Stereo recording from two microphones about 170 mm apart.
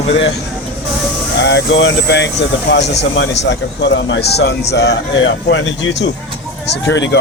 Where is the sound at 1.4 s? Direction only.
90° left.